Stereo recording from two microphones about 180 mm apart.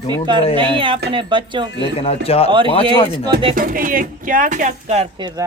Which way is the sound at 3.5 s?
50° right (ahead or behind).